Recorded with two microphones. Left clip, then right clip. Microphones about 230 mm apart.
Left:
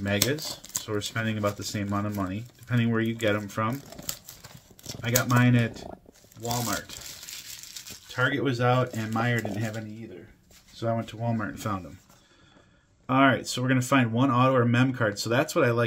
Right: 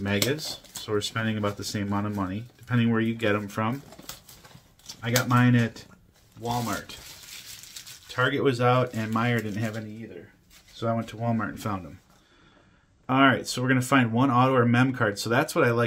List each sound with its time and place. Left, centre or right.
0.3 s speech: centre
5.2 s speech: centre
8.1 s speech: centre
13.0 s speech: centre